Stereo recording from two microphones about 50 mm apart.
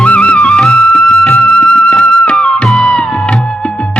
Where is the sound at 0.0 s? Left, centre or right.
Left.